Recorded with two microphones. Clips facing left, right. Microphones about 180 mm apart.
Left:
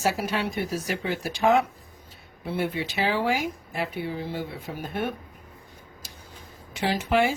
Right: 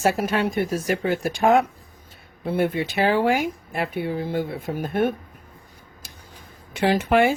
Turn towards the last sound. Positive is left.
turn(degrees=-55)  # may be behind; listen again after turning